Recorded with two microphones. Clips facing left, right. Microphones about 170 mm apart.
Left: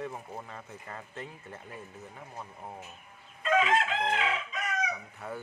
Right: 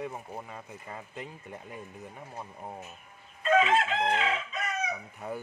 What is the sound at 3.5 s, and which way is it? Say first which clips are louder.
Chicken: right 2 dB; centre (ahead or behind).